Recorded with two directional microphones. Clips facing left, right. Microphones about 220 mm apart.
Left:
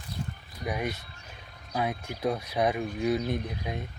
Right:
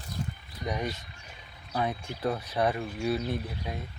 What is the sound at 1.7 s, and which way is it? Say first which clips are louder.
Speech: even; 10° left (ahead or behind).